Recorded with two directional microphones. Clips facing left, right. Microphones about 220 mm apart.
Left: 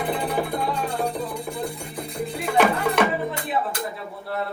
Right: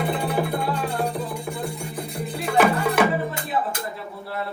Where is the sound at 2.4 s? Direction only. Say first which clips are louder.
Right 1 dB; centre (ahead or behind).